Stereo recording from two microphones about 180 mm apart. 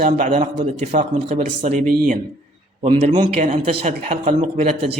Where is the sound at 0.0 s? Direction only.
45° right (ahead or behind).